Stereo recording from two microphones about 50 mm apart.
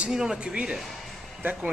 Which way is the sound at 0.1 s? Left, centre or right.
Centre.